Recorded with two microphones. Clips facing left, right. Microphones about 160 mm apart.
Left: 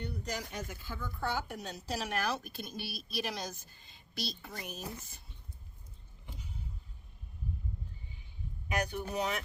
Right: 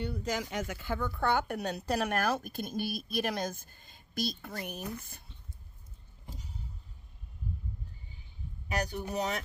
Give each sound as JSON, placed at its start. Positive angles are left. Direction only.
{"t": 0.0, "sound": "a woman's voice", "side_deg": -90}
{"t": 6.2, "sound": "a sound", "side_deg": -40}
{"t": 8.7, "sound": "speech", "side_deg": -40}